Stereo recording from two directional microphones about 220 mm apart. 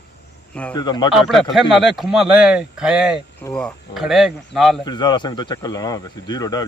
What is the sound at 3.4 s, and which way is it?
Speech, 5° left (ahead or behind).